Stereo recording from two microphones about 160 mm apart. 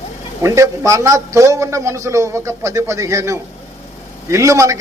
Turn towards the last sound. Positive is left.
turn(degrees=-20)  # may be behind; listen again after turning